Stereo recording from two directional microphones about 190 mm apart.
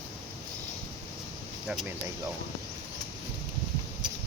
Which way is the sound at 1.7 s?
Centre (ahead or behind).